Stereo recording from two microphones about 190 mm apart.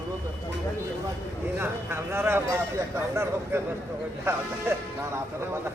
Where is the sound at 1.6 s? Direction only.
10° right (ahead or behind).